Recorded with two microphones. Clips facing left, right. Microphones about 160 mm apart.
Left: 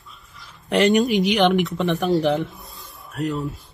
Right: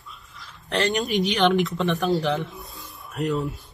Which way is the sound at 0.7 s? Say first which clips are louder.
Left 7 dB; 15° left (ahead or behind).